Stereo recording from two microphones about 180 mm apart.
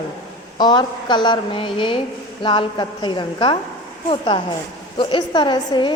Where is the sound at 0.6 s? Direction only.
25° left (ahead or behind).